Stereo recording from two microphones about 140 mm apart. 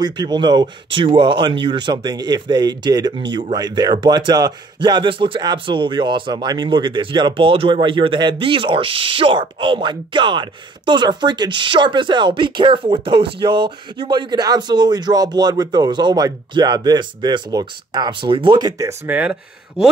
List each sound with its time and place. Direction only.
0.0 s speech: 30° right (ahead or behind)
19.0 s speech: 10° right (ahead or behind)